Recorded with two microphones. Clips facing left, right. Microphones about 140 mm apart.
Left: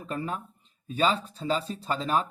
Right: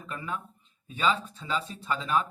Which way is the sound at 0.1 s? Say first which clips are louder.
Left 4 dB; 35° left (ahead or behind).